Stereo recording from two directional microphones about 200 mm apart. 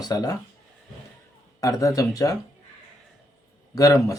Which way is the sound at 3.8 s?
15° left (ahead or behind).